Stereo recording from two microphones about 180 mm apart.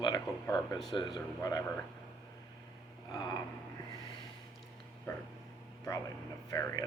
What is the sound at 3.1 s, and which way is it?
Speech, 20° left (ahead or behind).